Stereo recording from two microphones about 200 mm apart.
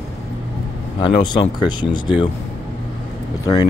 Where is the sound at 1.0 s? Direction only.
25° left (ahead or behind).